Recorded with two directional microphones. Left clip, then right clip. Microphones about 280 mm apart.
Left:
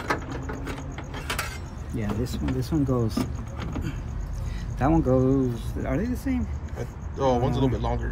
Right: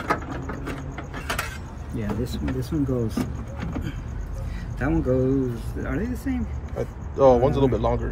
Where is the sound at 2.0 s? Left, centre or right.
Centre.